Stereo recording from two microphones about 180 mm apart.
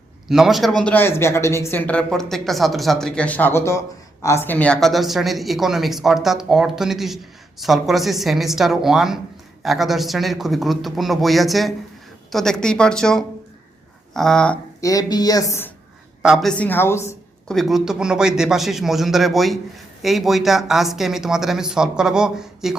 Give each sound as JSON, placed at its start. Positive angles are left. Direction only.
{"t": 0.3, "sound": "a woman's voice", "side_deg": 0}
{"t": 0.8, "sound": "a woman's voice", "side_deg": 10}
{"t": 14.8, "sound": "speech", "side_deg": 20}
{"t": 16.2, "sound": "speech", "side_deg": 0}
{"t": 17.5, "sound": "a woman's voice", "side_deg": 0}